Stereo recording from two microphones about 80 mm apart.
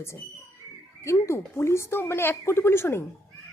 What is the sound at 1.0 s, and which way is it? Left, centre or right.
A woman's voice, left.